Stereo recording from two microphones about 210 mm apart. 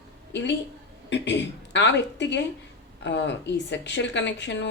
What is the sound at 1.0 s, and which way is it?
Speech, 55° left (ahead or behind).